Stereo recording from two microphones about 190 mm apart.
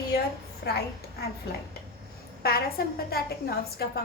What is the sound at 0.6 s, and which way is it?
Speech, 65° left (ahead or behind).